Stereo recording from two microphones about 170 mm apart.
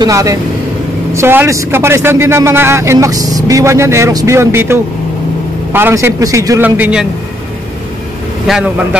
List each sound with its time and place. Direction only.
0.0 s a man's voice: 20° right (ahead or behind)
8.5 s a man's voice: centre (ahead or behind)